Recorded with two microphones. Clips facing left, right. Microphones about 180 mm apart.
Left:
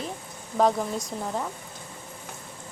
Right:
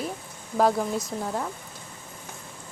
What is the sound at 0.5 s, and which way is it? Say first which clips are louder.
Speech: right 1 dB; 5° right (ahead or behind).